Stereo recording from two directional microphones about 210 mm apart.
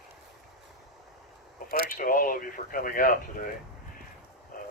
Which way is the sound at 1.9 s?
40° left (ahead or behind).